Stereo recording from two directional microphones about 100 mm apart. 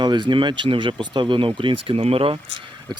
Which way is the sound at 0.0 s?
50° right (ahead or behind).